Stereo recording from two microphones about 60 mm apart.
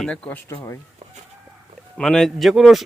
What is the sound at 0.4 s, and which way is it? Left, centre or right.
Speech, left.